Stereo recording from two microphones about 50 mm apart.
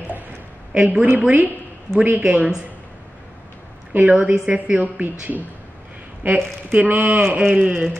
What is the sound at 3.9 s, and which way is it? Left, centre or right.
Speech, right.